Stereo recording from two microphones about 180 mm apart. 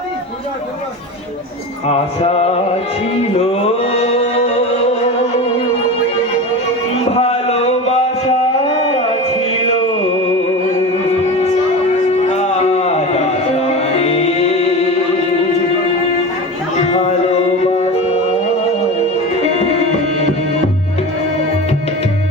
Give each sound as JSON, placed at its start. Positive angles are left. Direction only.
{"t": 1.9, "sound": "music", "side_deg": 35}
{"t": 7.1, "sound": "a sound", "side_deg": 35}
{"t": 12.3, "sound": "music", "side_deg": 35}